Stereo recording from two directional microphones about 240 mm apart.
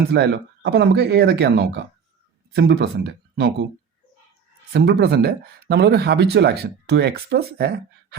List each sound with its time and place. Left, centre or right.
0.1 s speech: right
4.7 s speech: right